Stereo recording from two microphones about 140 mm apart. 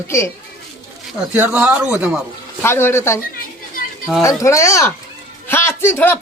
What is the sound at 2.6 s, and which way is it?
Speech, 15° left (ahead or behind).